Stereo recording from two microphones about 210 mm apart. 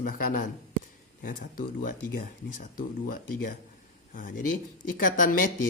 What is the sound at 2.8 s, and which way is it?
Speech, 40° left (ahead or behind).